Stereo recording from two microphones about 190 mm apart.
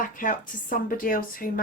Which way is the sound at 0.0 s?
45° left (ahead or behind).